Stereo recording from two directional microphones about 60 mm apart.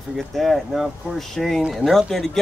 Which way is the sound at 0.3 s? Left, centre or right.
Centre.